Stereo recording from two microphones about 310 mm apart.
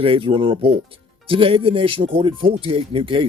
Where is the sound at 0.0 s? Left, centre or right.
Centre.